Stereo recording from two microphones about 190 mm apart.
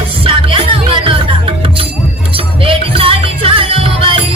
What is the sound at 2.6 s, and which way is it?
Music, 30° right (ahead or behind).